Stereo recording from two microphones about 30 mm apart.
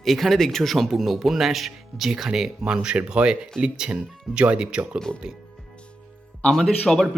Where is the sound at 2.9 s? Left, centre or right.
Right.